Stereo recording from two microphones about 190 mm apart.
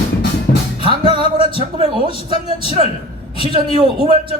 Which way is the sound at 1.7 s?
30° right (ahead or behind).